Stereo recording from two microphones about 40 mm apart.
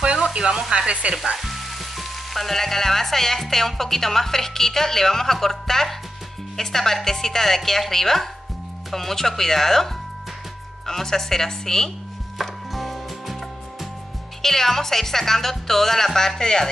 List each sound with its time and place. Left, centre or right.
0.0 s sizzle: right
0.7 s speech: right
1.1 s speech: centre
10.9 s speech: centre
12.4 s music: centre
14.4 s speech: centre